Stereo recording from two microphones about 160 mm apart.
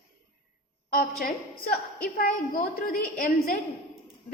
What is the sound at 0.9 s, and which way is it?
A woman's voice, 60° left (ahead or behind).